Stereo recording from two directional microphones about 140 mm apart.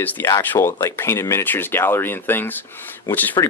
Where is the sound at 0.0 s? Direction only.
15° left (ahead or behind).